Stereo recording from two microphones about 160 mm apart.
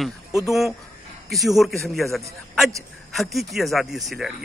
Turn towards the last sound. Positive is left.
turn(degrees=0)  # may be behind; listen again after turning